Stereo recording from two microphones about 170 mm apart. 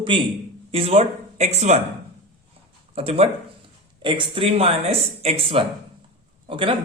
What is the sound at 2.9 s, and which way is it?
Speech, 35° right (ahead or behind).